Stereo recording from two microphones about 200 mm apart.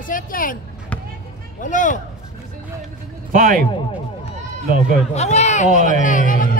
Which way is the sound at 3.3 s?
40° right (ahead or behind).